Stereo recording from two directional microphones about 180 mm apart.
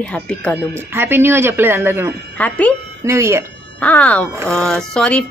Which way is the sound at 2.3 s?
10° left (ahead or behind).